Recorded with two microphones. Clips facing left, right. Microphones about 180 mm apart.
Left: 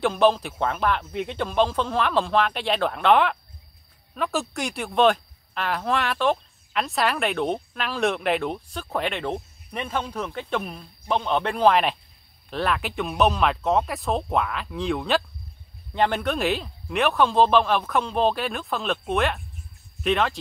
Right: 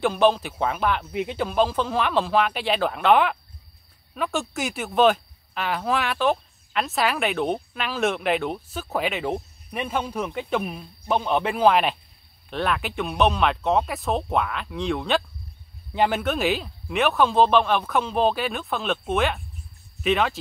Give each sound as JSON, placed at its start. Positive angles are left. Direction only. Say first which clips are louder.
{"t": 0.0, "sound": "speech", "louder": "even", "side_deg": 0}